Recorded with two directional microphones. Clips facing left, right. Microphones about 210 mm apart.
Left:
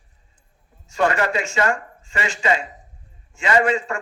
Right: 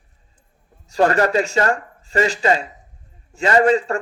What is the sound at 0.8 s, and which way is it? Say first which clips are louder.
A man's voice: right 4 dB; 35° right (ahead or behind).